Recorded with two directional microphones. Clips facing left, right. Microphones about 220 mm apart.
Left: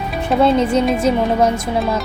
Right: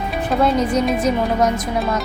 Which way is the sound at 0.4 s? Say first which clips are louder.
Left 3 dB; 25° left (ahead or behind).